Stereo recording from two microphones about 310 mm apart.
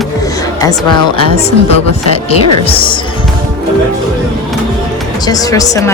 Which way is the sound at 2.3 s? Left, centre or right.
Centre.